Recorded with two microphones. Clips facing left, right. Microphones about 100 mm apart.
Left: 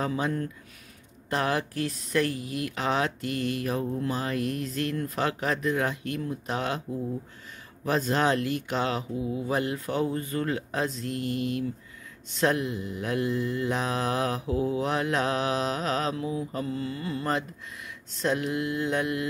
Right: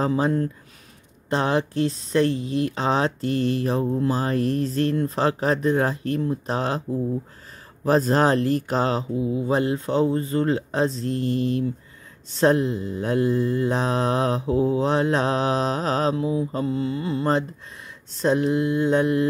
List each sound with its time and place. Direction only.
0.0 s speech: 30° right (ahead or behind)
7.8 s speech: 35° right (ahead or behind)
18.1 s mantra: 30° right (ahead or behind)